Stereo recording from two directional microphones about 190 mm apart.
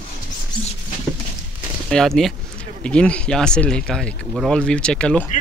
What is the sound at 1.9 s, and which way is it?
Speech, 5° left (ahead or behind).